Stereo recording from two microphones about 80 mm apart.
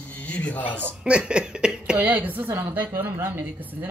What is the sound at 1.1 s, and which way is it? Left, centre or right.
Speech, centre.